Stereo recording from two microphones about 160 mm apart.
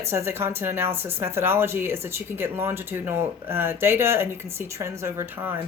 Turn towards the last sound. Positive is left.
turn(degrees=-15)  # may be behind; listen again after turning